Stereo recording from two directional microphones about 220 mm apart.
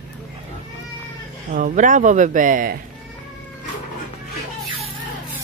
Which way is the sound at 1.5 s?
35° right (ahead or behind).